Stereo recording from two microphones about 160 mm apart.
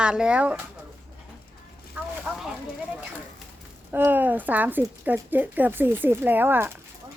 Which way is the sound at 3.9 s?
15° right (ahead or behind).